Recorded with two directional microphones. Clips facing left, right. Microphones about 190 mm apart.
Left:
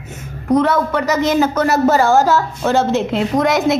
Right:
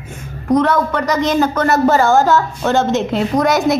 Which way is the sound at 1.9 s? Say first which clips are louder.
Right 1 dB; 35° left (ahead or behind).